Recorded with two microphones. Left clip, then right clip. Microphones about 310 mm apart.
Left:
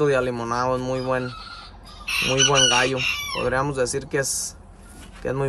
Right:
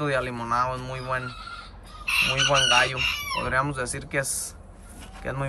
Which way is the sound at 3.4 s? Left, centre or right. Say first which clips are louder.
Left 5 dB; centre.